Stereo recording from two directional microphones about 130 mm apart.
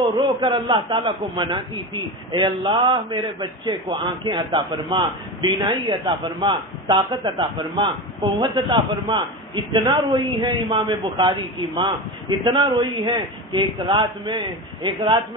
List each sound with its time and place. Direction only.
0.2 s a man's voice: 40° right (ahead or behind)